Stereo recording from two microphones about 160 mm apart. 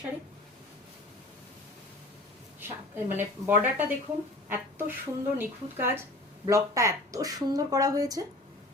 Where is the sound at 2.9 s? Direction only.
15° right (ahead or behind).